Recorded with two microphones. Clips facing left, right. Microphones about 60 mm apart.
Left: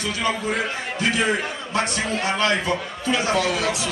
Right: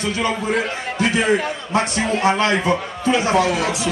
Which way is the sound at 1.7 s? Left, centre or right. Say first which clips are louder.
Right 4 dB; right.